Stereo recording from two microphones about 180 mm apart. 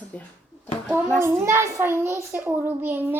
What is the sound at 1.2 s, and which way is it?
A child's voice, 15° right (ahead or behind).